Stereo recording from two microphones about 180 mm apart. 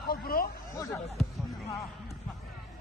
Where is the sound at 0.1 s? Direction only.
55° left (ahead or behind).